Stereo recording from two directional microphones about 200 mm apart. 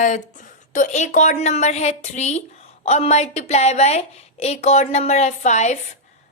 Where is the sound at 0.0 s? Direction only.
40° left (ahead or behind).